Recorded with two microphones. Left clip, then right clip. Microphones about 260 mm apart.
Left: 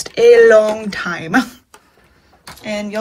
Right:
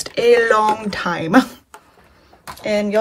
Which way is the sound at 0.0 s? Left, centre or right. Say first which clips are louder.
Left 6 dB; centre.